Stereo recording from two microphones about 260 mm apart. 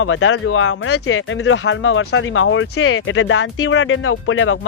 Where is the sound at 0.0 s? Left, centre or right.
Left.